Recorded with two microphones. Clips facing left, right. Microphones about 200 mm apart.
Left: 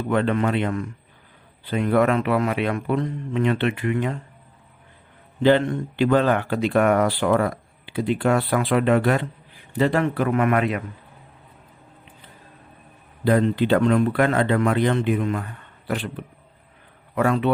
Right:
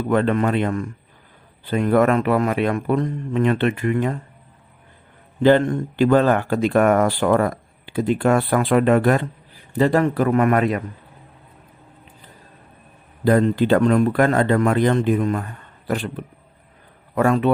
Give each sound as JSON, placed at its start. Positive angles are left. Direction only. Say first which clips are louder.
{"t": 0.1, "sound": "speech", "louder": "right 2 dB", "side_deg": -45}
{"t": 5.4, "sound": "speech", "louder": "right 3 dB", "side_deg": -45}
{"t": 13.2, "sound": "speech", "louder": "right 3 dB", "side_deg": -45}